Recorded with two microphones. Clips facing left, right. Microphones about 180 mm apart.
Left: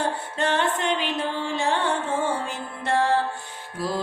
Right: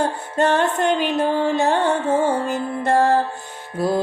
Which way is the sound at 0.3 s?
45° right (ahead or behind).